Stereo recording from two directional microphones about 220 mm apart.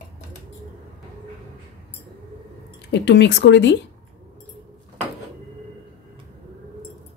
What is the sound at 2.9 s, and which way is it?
Speech, 50° left (ahead or behind).